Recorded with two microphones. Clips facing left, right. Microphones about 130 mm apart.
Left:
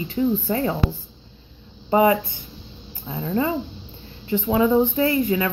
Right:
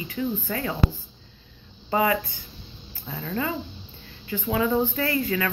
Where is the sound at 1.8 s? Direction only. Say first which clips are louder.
Left 6 dB; 25° left (ahead or behind).